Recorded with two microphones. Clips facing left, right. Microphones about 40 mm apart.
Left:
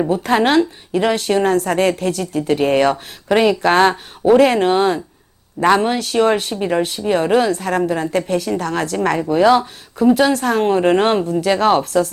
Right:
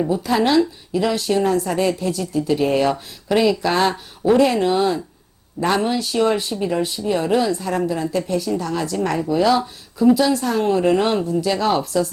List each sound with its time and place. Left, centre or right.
0.1 s a woman's voice: left
1.5 s speech: left
5.6 s speech: left
6.1 s a woman's voice: left